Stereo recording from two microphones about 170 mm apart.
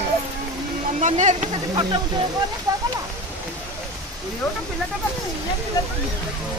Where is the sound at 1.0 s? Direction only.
45° right (ahead or behind).